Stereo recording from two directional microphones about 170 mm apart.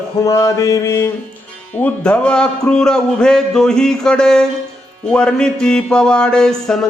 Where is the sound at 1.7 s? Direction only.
10° left (ahead or behind).